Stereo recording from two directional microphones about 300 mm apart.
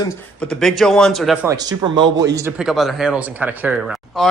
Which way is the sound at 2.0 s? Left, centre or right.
Right.